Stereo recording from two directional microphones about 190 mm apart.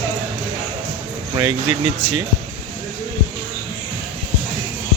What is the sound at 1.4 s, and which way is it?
Speech, 25° right (ahead or behind).